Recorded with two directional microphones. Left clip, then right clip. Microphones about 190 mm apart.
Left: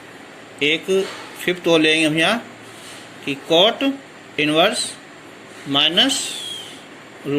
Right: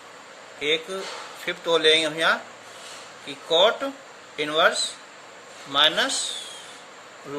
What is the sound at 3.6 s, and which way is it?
Speech, 10° left (ahead or behind).